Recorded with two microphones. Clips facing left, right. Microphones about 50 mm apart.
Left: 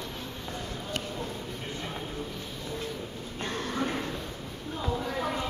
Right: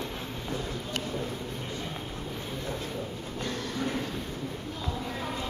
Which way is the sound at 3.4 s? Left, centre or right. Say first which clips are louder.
Left 2 dB; left.